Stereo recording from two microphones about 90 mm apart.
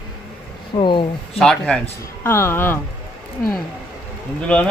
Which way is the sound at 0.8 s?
65° left (ahead or behind).